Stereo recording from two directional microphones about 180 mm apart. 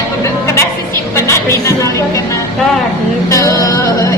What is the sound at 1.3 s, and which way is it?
Music, 15° left (ahead or behind).